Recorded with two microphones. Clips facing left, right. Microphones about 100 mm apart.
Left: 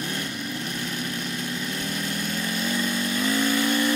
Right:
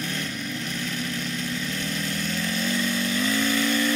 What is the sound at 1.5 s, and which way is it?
Vehicle, 15° left (ahead or behind).